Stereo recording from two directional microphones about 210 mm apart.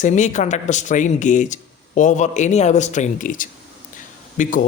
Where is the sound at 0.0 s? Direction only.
35° left (ahead or behind).